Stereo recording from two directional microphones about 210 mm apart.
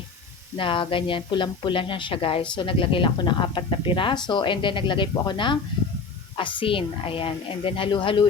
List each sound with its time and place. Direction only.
0.5 s speech: 25° left (ahead or behind)